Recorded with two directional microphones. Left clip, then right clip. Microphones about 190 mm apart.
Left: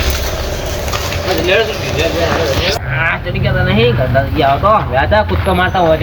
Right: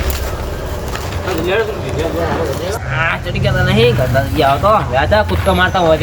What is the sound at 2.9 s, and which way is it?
Speech, 30° right (ahead or behind).